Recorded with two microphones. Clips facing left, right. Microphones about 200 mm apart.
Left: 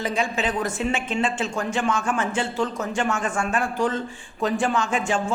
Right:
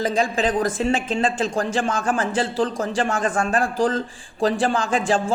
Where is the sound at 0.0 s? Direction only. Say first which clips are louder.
Right 4 dB; 35° right (ahead or behind).